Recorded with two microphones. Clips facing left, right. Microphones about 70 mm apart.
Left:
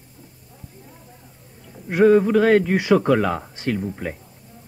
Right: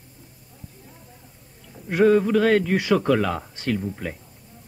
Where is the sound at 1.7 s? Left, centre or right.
Centre.